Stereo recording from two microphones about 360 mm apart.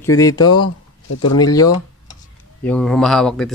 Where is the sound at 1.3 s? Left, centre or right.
Centre.